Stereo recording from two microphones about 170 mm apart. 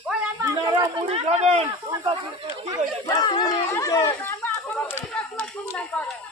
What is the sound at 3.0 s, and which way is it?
Speech, 25° left (ahead or behind).